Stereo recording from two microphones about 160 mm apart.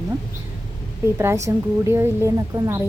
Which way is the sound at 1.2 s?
20° right (ahead or behind).